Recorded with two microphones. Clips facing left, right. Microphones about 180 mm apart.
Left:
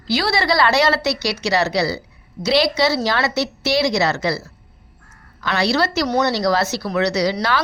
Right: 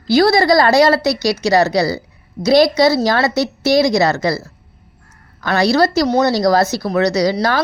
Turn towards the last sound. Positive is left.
turn(degrees=-40)  # may be behind; listen again after turning